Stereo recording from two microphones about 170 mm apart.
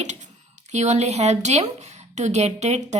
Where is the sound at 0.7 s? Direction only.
45° right (ahead or behind).